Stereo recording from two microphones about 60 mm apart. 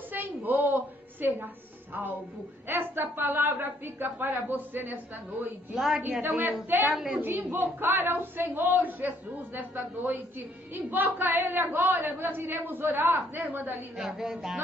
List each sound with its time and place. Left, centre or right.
0.1 s a sound: right
2.7 s a woman's voice: right
5.8 s a woman's voice: centre
6.2 s a woman's voice: right
6.9 s speech: centre
7.2 s a woman's voice: right
13.9 s a woman's voice: centre